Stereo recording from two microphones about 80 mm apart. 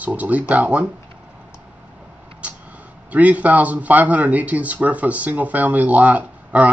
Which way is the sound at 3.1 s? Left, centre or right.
Centre.